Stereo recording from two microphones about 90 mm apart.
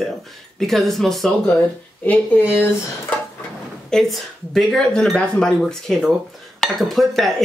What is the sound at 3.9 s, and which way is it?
Speech, 5° left (ahead or behind).